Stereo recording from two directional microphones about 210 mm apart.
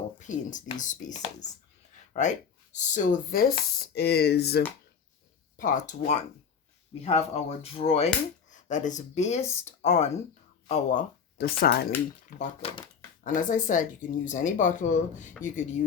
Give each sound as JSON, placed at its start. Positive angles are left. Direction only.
{"t": 0.2, "sound": "speech", "side_deg": 35}
{"t": 5.5, "sound": "speech", "side_deg": 40}
{"t": 12.4, "sound": "speech", "side_deg": 25}
{"t": 13.2, "sound": "speech", "side_deg": 40}